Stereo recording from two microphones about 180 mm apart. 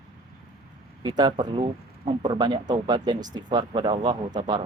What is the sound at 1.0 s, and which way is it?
Speech, 25° right (ahead or behind).